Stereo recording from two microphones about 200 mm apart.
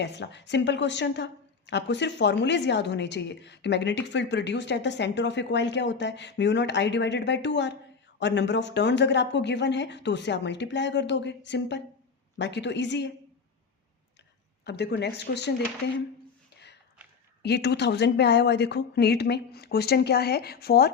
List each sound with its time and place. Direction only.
0.0 s a woman's voice: 60° left (ahead or behind)
14.6 s a woman's voice: 55° left (ahead or behind)
17.4 s a woman's voice: 55° left (ahead or behind)